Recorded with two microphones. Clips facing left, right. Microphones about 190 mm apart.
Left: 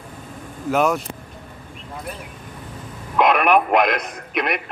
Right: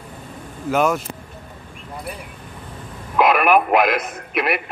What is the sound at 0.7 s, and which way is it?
Speech, centre (ahead or behind).